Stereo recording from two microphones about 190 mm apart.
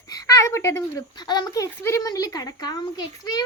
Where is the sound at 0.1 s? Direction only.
15° left (ahead or behind).